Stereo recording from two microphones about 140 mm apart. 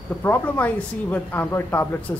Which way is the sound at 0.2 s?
15° left (ahead or behind).